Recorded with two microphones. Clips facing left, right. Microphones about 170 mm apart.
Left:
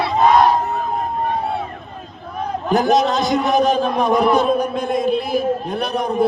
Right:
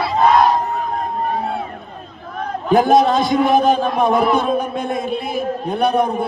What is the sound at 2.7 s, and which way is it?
A man's voice, 50° right (ahead or behind).